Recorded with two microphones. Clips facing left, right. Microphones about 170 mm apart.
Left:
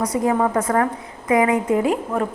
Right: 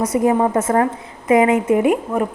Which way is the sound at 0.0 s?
20° right (ahead or behind).